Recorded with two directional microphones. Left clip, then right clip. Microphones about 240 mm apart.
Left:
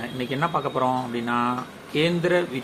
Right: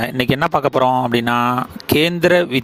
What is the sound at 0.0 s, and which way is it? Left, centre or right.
Speech, right.